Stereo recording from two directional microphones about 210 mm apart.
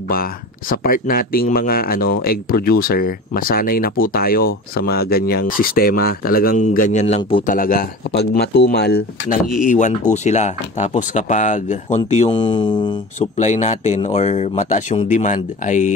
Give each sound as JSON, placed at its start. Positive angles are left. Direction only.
{"t": 0.1, "sound": "speech", "side_deg": 45}
{"t": 7.5, "sound": "speech", "side_deg": 45}
{"t": 9.7, "sound": "speech", "side_deg": 35}
{"t": 13.4, "sound": "speech", "side_deg": 35}